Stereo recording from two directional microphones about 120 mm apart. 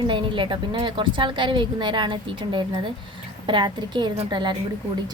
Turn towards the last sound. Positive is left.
turn(degrees=-40)  # may be behind; listen again after turning